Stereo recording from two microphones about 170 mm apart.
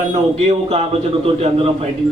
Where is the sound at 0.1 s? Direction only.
40° right (ahead or behind).